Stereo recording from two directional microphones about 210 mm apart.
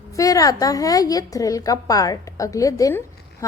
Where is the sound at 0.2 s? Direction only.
15° left (ahead or behind).